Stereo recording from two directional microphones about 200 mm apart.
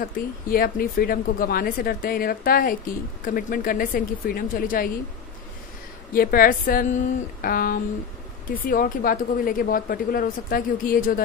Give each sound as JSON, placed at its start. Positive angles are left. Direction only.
{"t": 0.0, "sound": "speech", "side_deg": 45}
{"t": 6.1, "sound": "speech", "side_deg": 45}